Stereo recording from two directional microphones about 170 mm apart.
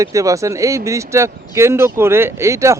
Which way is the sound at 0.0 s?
20° right (ahead or behind).